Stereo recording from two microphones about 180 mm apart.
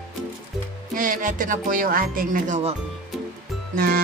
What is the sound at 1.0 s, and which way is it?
Speech, 50° right (ahead or behind).